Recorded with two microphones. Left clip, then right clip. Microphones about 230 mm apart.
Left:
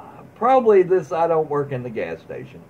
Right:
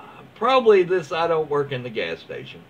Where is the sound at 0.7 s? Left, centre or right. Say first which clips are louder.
Left 1 dB; centre.